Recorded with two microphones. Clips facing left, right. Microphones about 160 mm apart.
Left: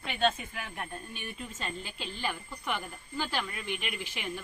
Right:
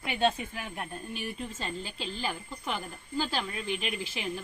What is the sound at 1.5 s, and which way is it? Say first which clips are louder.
Speech: right 2 dB; 30° right (ahead or behind).